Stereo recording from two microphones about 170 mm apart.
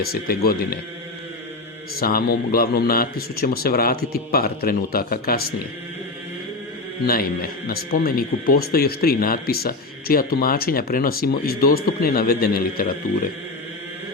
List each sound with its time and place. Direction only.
0.0 s speech: 65° left (ahead or behind)
2.0 s speech: 60° left (ahead or behind)
7.7 s speech: 60° left (ahead or behind)